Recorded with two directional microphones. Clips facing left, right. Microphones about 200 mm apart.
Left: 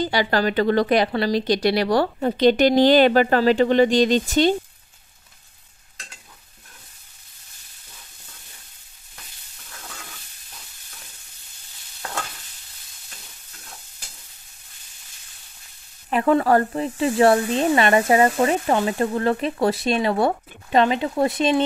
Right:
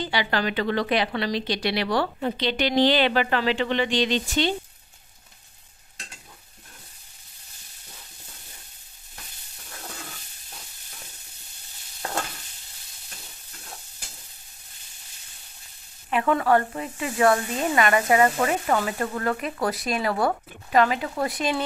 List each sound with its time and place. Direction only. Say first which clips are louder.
0.0 s a woman's voice: left 5 dB; 40° left (ahead or behind)
12.0 s stir: right 2 dB; 30° right (ahead or behind)
16.1 s speech: left 3 dB; 35° left (ahead or behind)